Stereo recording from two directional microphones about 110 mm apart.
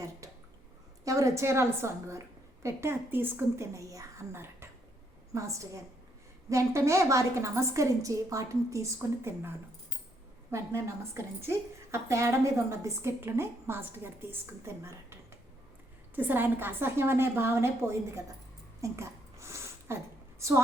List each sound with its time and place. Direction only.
0.2 s bathtub: 30° right (ahead or behind)
1.0 s a woman's voice: 30° right (ahead or behind)
18.8 s a sound: 25° right (ahead or behind)
20.4 s a woman's voice: 25° right (ahead or behind)